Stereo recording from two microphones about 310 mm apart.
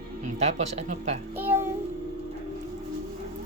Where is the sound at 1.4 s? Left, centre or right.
Centre.